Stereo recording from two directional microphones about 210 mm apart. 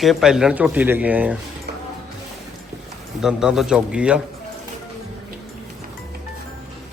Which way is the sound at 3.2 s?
Centre (ahead or behind).